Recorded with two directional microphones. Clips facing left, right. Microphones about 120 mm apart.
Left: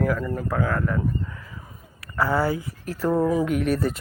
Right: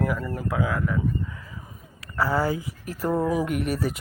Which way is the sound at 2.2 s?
15° right (ahead or behind).